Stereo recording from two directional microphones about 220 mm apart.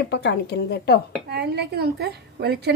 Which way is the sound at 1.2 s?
45° right (ahead or behind).